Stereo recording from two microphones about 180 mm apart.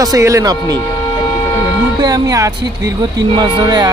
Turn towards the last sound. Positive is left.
turn(degrees=-20)  # may be behind; listen again after turning